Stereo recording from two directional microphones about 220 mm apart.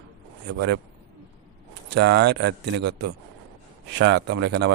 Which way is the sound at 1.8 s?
50° right (ahead or behind).